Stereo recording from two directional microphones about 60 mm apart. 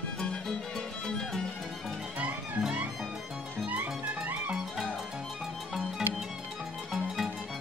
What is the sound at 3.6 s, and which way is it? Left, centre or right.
Music, right.